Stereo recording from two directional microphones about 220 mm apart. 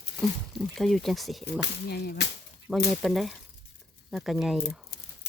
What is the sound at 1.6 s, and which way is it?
Speech, 45° left (ahead or behind).